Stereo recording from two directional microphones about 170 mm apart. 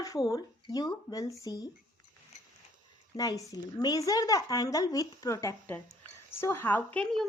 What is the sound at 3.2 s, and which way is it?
A woman's voice, 20° left (ahead or behind).